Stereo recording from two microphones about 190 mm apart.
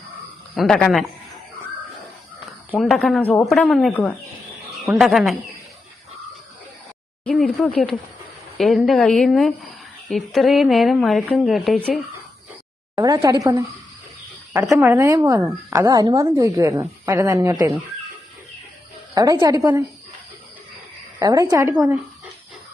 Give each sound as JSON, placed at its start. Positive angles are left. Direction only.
{"t": 0.5, "sound": "speech", "side_deg": 0}
{"t": 2.5, "sound": "a woman's voice", "side_deg": 0}
{"t": 7.3, "sound": "speech", "side_deg": 5}
{"t": 13.0, "sound": "a woman's voice", "side_deg": -20}
{"t": 14.7, "sound": "a woman's voice", "side_deg": -10}
{"t": 19.1, "sound": "a woman's voice", "side_deg": -15}
{"t": 21.2, "sound": "a woman's voice", "side_deg": -20}